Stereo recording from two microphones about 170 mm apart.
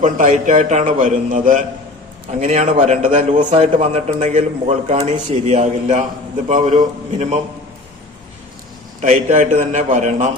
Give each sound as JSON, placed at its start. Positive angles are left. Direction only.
{"t": 0.0, "sound": "a man's voice", "side_deg": -45}
{"t": 9.0, "sound": "a man's voice", "side_deg": -50}